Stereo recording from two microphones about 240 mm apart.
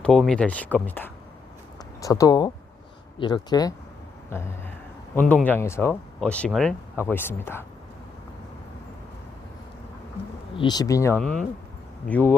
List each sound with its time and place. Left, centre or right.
0.0 s speech: centre
10.6 s speech: centre